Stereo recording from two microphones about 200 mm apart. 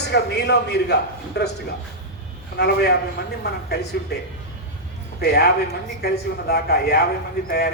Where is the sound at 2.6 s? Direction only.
55° left (ahead or behind).